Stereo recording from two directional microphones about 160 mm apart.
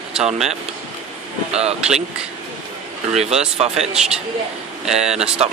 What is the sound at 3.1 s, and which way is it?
Speech, 40° right (ahead or behind).